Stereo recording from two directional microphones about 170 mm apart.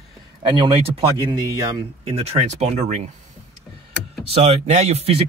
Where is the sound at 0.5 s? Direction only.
30° right (ahead or behind).